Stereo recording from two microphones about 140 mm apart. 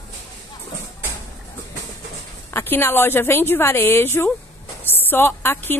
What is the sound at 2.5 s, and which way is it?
A woman's voice, 15° left (ahead or behind).